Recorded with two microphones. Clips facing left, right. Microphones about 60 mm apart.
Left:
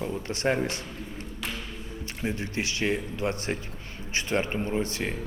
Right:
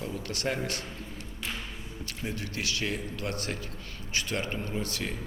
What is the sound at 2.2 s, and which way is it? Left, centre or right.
Speech, left.